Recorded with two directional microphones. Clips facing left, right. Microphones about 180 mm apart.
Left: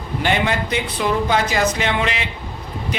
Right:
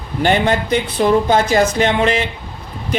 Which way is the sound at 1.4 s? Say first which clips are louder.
Right 5 dB; 30° right (ahead or behind).